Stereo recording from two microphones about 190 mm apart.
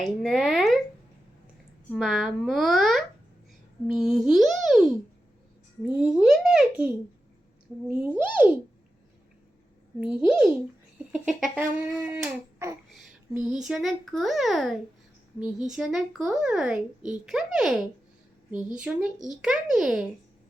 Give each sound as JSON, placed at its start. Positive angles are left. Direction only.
{"t": 0.0, "sound": "speech", "side_deg": 0}
{"t": 1.9, "sound": "a child's voice", "side_deg": 0}
{"t": 10.0, "sound": "a child's voice", "side_deg": -5}
{"t": 12.0, "sound": "a sound", "side_deg": -10}
{"t": 13.7, "sound": "speech", "side_deg": 0}